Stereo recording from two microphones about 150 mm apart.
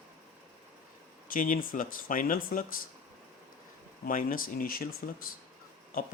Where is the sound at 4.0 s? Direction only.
65° left (ahead or behind).